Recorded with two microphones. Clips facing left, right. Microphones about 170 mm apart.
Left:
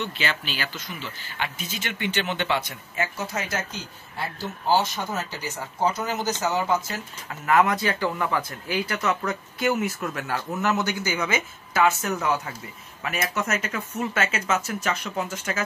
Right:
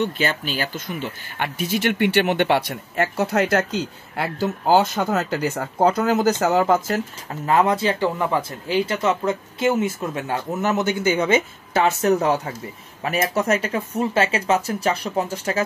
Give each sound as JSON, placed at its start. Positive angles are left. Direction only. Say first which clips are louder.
{"t": 0.2, "sound": "speech", "louder": "right 6 dB", "side_deg": -45}
{"t": 7.2, "sound": "speech", "louder": "right 2 dB", "side_deg": -30}